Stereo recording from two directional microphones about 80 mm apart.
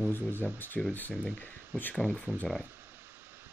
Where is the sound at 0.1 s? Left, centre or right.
Left.